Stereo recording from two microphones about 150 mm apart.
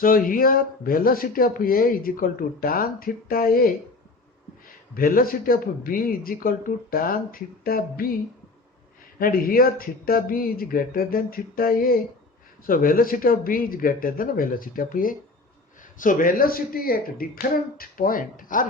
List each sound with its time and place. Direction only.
0.0 s speech: 70° left (ahead or behind)
4.9 s speech: 75° left (ahead or behind)
9.1 s speech: 75° left (ahead or behind)